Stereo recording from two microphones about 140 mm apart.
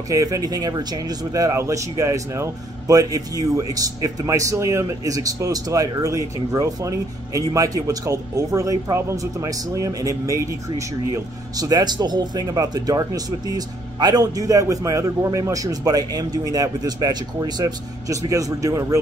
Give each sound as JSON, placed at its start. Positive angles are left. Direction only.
{"t": 0.1, "sound": "speech", "side_deg": -25}